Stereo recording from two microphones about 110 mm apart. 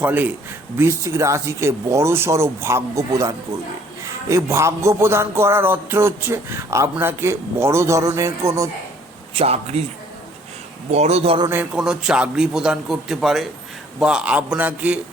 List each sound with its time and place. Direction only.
0.0 s a man's voice: 15° right (ahead or behind)
0.8 s speech: 25° right (ahead or behind)
9.3 s speech: 65° right (ahead or behind)
10.9 s a man's voice: 75° right (ahead or behind)
11.4 s a man's voice: 15° right (ahead or behind)